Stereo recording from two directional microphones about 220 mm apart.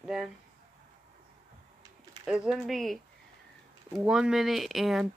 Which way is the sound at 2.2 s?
Centre (ahead or behind).